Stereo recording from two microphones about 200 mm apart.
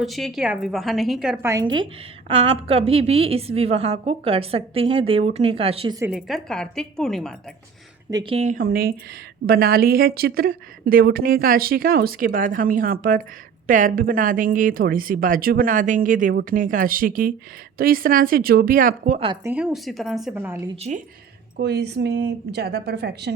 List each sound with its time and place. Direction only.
0.0 s a woman's voice: centre (ahead or behind)
1.7 s a woman's voice: 30° right (ahead or behind)
6.0 s a woman's voice: 5° right (ahead or behind)
8.1 s a woman's voice: 25° right (ahead or behind); by 19.2 s 40° right (ahead or behind)
19.2 s a woman's voice: 25° right (ahead or behind)
19.5 s a woman's voice: 5° right (ahead or behind)
21.6 s speech: 55° right (ahead or behind)